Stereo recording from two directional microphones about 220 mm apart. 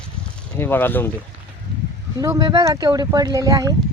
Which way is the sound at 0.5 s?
10° left (ahead or behind).